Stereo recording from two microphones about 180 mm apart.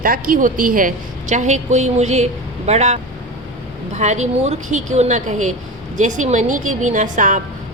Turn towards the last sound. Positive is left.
turn(degrees=-45)  # may be behind; listen again after turning